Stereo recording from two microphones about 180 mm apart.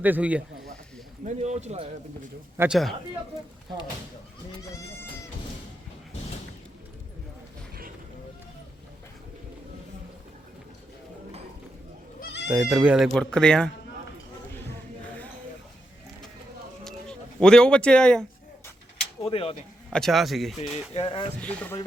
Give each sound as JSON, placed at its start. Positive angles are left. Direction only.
{"t": 0.0, "sound": "a man's voice", "side_deg": -10}
{"t": 1.2, "sound": "speech", "side_deg": -40}
{"t": 2.6, "sound": "speech", "side_deg": 0}
{"t": 4.6, "sound": "speech", "side_deg": 15}
{"t": 12.5, "sound": "speech", "side_deg": -10}
{"t": 16.8, "sound": "a sound", "side_deg": 5}
{"t": 19.2, "sound": "speech", "side_deg": 30}
{"t": 19.9, "sound": "speech", "side_deg": 0}
{"t": 20.9, "sound": "speech", "side_deg": 30}
{"t": 21.4, "sound": "speech", "side_deg": 5}